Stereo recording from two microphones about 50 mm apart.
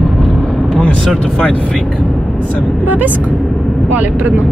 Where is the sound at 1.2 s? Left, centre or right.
Left.